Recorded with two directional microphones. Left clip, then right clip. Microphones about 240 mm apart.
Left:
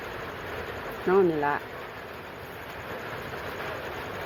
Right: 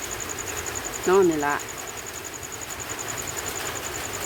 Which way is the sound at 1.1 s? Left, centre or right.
Centre.